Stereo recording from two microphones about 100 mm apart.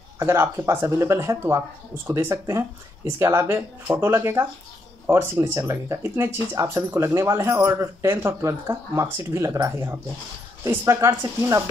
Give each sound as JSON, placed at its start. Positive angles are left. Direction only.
{"t": 0.2, "sound": "speech", "side_deg": -25}